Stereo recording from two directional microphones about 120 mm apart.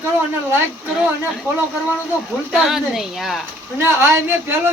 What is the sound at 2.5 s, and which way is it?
Speech, 5° right (ahead or behind).